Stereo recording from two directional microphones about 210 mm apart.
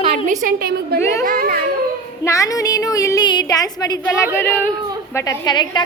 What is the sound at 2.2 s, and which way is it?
Speech, 15° left (ahead or behind).